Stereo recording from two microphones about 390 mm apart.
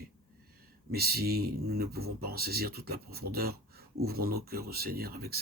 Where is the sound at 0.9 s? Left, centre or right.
Right.